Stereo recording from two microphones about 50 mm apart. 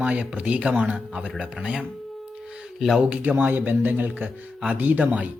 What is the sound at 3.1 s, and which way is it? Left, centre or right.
Speech, right.